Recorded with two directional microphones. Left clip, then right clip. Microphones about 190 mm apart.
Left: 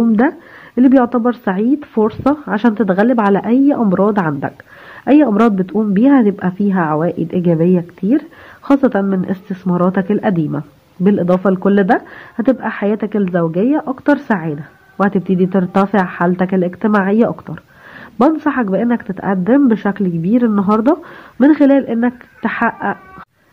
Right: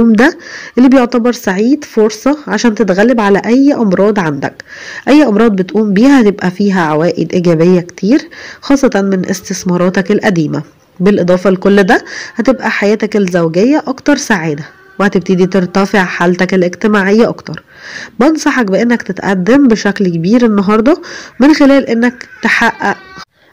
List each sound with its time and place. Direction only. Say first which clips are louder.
0.1 s speech: right 6 dB; 30° right (ahead or behind)